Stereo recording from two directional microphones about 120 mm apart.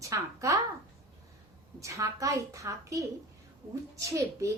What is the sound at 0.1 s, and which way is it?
Child singing, 25° right (ahead or behind).